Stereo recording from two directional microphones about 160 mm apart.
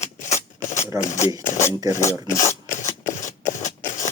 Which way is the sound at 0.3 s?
15° left (ahead or behind).